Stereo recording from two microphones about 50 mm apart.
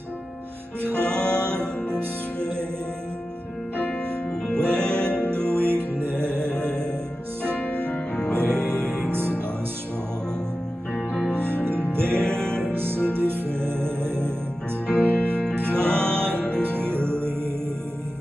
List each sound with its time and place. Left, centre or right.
1.0 s music: left
2.0 s music: right
3.7 s music: left
5.3 s music: right
7.4 s music: left
11.4 s music: right
12.1 s music: left
12.7 s music: right
14.9 s music: left